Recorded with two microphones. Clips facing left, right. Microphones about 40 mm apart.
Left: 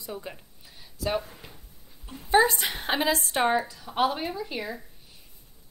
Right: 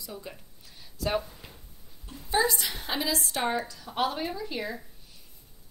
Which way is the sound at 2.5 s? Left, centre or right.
Left.